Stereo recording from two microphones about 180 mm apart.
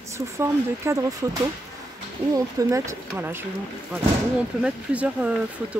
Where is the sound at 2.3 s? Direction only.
20° right (ahead or behind).